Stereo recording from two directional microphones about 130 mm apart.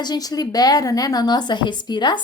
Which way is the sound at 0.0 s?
30° left (ahead or behind).